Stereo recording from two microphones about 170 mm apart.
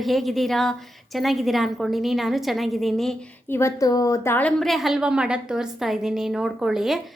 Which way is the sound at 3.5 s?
15° left (ahead or behind).